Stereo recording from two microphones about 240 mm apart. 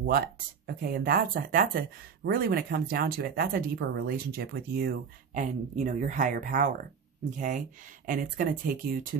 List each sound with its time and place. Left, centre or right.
0.0 s speech: right